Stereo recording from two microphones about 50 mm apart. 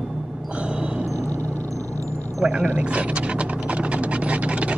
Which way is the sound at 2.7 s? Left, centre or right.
Right.